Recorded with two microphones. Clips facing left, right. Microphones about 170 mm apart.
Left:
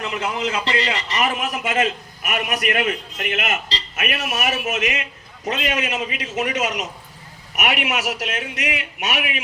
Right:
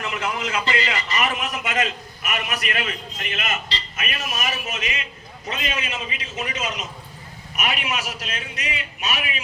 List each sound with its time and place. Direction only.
0.0 s a man's voice: 30° left (ahead or behind)
2.3 s a man's voice: 60° left (ahead or behind); by 9.4 s 75° left (ahead or behind)